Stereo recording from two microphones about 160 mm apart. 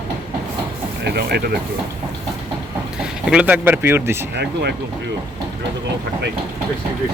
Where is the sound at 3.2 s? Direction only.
10° right (ahead or behind).